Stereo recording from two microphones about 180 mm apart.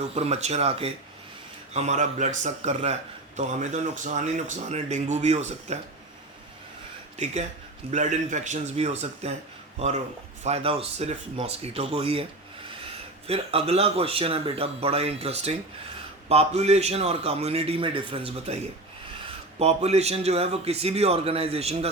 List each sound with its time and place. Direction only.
0.0 s speech: 35° right (ahead or behind)
7.9 s speech: 40° right (ahead or behind)
13.2 s speech: 35° right (ahead or behind)